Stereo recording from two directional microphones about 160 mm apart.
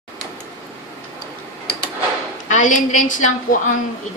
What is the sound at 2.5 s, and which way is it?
A woman's voice, 50° left (ahead or behind).